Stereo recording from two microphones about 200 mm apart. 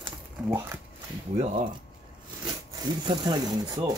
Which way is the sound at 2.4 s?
20° right (ahead or behind).